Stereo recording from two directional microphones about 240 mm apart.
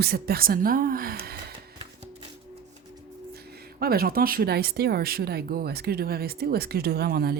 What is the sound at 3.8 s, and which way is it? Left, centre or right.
Speech, right.